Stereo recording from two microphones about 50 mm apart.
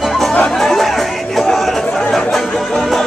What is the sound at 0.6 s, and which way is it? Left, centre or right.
Chatter, centre.